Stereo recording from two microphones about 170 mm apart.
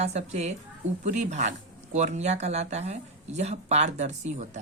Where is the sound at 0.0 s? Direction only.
40° right (ahead or behind).